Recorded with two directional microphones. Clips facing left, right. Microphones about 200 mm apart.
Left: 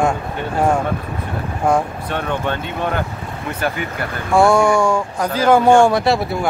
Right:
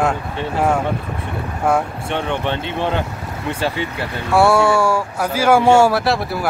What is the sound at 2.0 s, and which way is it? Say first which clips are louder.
Speech: even; 25° right (ahead or behind).